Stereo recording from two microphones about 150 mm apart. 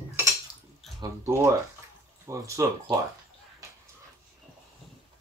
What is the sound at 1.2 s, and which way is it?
Speech, 20° right (ahead or behind).